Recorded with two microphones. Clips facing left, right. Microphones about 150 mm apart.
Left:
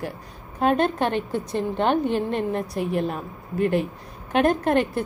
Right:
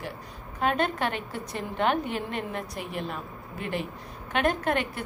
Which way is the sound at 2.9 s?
45° left (ahead or behind).